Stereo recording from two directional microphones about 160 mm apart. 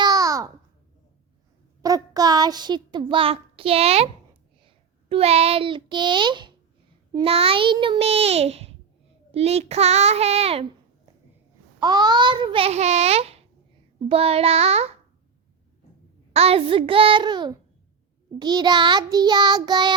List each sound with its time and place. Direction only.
0.0 s babbling: 25° right (ahead or behind)
1.8 s a child's voice: 25° right (ahead or behind); by 10.7 s 40° right (ahead or behind)
11.8 s a child's voice: 25° right (ahead or behind); by 14.9 s 40° right (ahead or behind)
16.3 s a child's voice: 40° right (ahead or behind)
18.3 s child singing: 25° right (ahead or behind)